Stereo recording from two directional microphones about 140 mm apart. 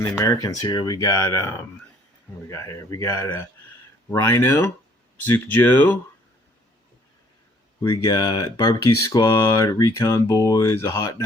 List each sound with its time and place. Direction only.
0.0 s speech: 25° left (ahead or behind)
7.8 s speech: 25° left (ahead or behind)